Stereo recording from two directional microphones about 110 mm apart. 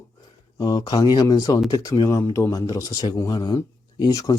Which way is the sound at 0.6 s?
40° left (ahead or behind).